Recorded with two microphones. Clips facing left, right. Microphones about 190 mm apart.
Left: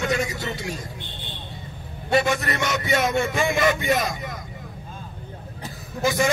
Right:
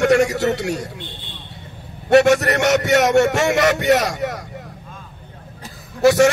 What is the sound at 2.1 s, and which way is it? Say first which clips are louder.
A man's voice: right 9 dB; 75° right (ahead or behind).